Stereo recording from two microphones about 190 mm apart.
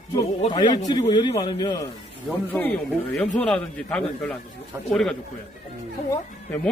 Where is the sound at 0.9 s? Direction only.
20° left (ahead or behind).